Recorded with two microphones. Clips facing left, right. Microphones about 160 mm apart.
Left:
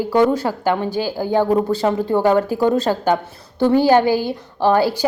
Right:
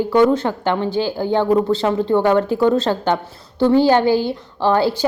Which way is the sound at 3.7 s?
15° left (ahead or behind).